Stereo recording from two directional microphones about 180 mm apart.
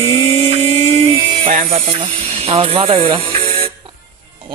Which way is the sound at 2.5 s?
30° right (ahead or behind).